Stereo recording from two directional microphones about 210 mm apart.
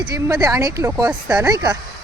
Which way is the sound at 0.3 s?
15° right (ahead or behind).